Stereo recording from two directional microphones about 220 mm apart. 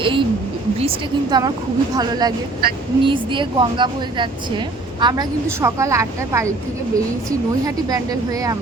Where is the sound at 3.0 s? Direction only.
20° right (ahead or behind).